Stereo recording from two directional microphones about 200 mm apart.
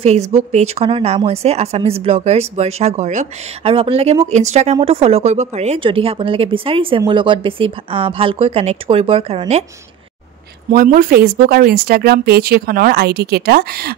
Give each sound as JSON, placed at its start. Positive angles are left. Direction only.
{"t": 0.0, "sound": "speech", "side_deg": -30}
{"t": 10.7, "sound": "speech", "side_deg": -45}